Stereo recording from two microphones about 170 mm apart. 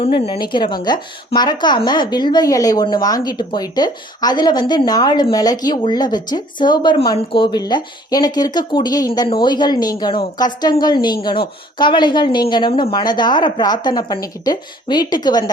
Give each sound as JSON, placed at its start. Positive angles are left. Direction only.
{"t": 0.0, "sound": "a woman's voice", "side_deg": 30}